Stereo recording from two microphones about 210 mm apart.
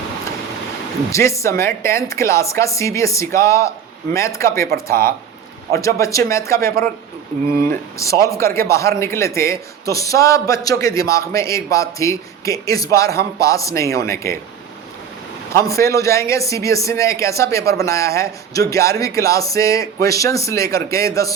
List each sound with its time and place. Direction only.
1.1 s speech: 15° left (ahead or behind)
4.7 s speech: 45° right (ahead or behind)
5.8 s speech: 15° left (ahead or behind)
7.9 s speech: 15° left (ahead or behind)
15.6 s speech: 15° left (ahead or behind)